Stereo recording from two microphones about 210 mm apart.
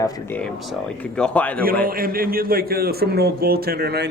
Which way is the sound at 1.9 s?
45° right (ahead or behind).